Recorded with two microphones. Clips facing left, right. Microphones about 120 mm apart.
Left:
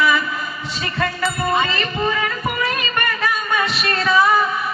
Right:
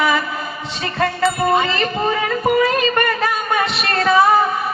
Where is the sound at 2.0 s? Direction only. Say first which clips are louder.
Right 3 dB; 40° right (ahead or behind).